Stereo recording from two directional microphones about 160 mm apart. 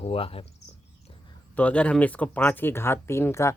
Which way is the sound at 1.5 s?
10° left (ahead or behind).